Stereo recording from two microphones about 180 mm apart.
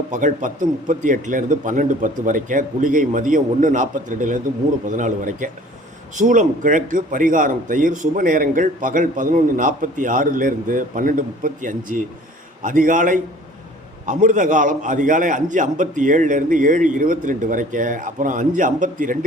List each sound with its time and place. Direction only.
0.1 s speech: 45° right (ahead or behind)